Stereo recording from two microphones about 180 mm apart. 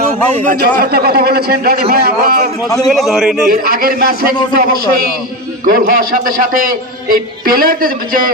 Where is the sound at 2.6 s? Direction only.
20° left (ahead or behind).